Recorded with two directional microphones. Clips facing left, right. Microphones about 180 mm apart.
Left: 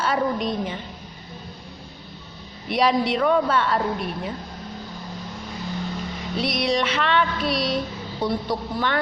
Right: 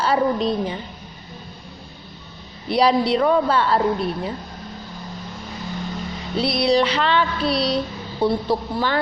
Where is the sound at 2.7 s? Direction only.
35° right (ahead or behind).